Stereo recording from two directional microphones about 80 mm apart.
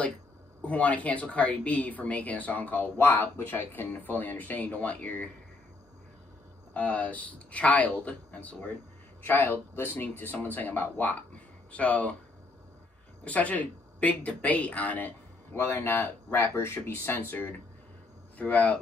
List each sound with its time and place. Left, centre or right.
0.7 s speech: centre
6.7 s speech: centre
13.2 s speech: centre